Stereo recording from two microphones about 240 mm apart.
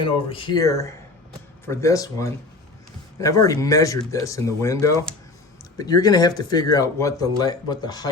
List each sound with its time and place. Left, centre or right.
0.0 s speech: left